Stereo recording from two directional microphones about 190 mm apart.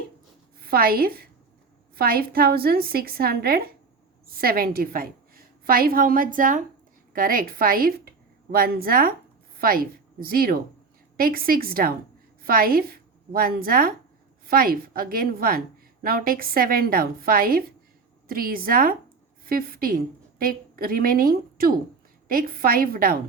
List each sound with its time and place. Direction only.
0.6 s a woman's voice: 50° right (ahead or behind)